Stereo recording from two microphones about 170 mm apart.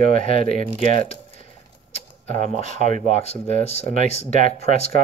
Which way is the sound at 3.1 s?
40° left (ahead or behind).